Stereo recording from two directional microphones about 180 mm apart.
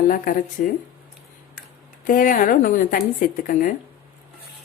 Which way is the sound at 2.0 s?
45° left (ahead or behind).